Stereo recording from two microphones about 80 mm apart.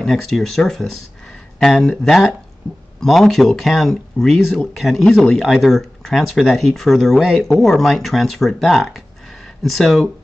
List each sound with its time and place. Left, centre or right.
0.0 s speech: centre